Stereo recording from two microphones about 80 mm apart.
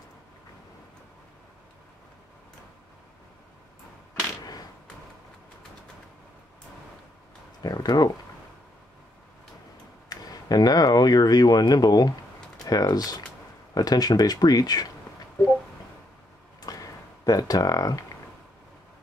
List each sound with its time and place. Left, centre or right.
7.6 s speech: left
10.0 s speech: left
16.6 s a sound: left